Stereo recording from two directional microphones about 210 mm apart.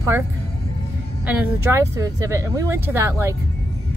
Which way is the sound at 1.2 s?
10° right (ahead or behind).